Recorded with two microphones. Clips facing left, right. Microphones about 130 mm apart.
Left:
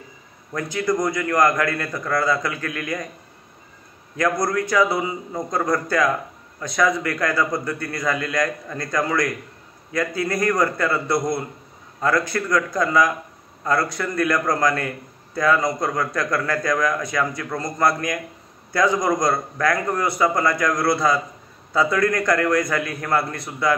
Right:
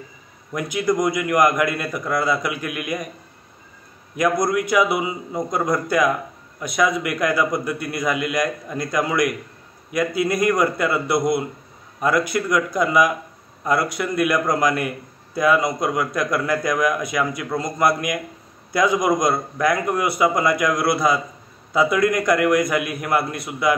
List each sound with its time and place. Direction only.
0.5 s a man's voice: 15° right (ahead or behind)
4.2 s a man's voice: 15° right (ahead or behind)